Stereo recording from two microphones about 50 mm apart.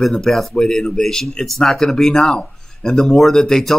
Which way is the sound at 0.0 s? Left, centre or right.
Centre.